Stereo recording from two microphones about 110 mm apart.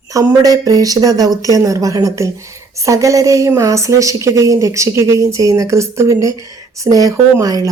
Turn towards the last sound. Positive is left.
turn(degrees=-30)  # may be behind; listen again after turning